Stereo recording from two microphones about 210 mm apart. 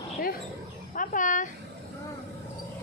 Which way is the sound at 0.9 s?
40° left (ahead or behind).